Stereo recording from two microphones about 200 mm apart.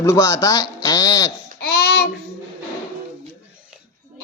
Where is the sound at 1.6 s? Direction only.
50° left (ahead or behind).